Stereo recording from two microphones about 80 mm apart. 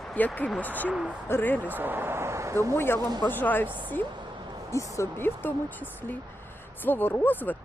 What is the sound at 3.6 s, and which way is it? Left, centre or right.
Speech, right.